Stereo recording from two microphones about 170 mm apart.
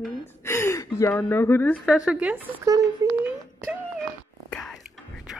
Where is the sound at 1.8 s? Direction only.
5° right (ahead or behind).